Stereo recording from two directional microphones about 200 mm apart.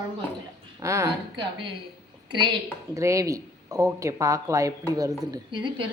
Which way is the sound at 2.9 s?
15° right (ahead or behind).